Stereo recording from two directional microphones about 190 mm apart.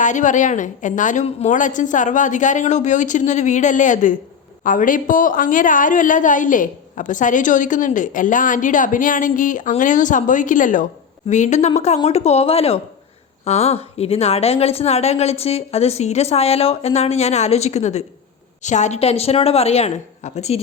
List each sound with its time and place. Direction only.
0.0 s a woman's voice: 40° left (ahead or behind)